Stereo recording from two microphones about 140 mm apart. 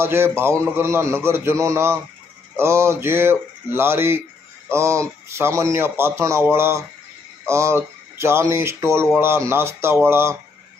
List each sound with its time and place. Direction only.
0.0 s a man's voice: 15° right (ahead or behind)